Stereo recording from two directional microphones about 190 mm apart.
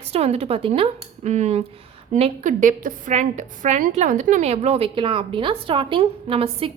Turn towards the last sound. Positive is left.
turn(degrees=-30)  # may be behind; listen again after turning